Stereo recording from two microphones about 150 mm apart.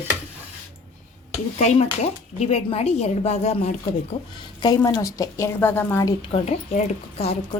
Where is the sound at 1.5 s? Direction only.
50° left (ahead or behind).